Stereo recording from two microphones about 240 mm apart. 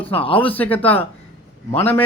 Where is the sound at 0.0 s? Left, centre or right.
Left.